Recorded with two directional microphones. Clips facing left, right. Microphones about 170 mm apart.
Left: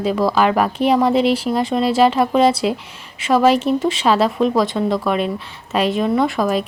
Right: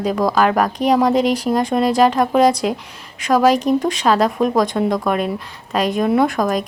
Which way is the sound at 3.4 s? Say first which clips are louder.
Even; 40° right (ahead or behind).